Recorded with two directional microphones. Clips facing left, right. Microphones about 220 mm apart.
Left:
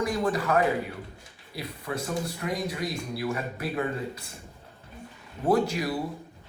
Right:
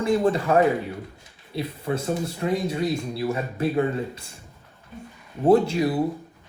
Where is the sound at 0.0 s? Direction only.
25° right (ahead or behind).